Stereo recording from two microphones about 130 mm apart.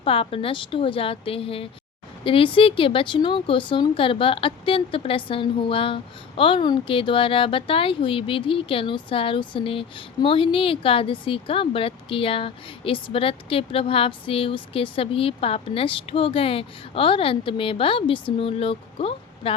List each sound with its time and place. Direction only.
0.0 s speech: 45° left (ahead or behind)